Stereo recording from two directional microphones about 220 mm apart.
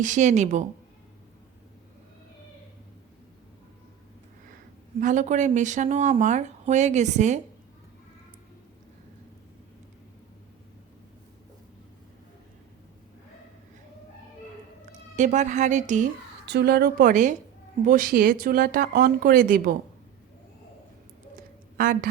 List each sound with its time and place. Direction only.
0.0 s speech: 35° right (ahead or behind)
4.9 s speech: 35° right (ahead or behind)
15.1 s speech: 35° right (ahead or behind)
16.5 s a woman's voice: 45° right (ahead or behind)
21.8 s speech: 35° right (ahead or behind)